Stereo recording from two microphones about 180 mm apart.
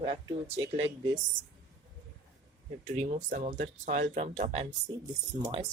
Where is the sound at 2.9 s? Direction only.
40° right (ahead or behind).